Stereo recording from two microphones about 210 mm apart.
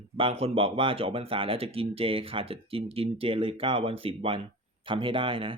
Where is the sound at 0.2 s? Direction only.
25° right (ahead or behind).